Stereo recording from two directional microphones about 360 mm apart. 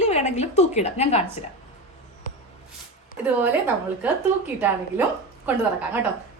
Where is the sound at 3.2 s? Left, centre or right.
Centre.